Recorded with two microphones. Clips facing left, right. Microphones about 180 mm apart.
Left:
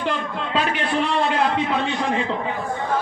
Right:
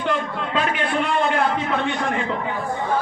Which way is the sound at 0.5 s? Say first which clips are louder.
Even; 30° left (ahead or behind).